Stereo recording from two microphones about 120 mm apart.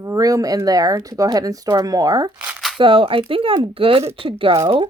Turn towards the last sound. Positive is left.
turn(degrees=-50)  # may be behind; listen again after turning